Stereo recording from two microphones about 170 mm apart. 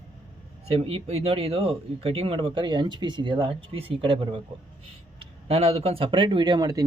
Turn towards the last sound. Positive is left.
turn(degrees=-25)  # may be behind; listen again after turning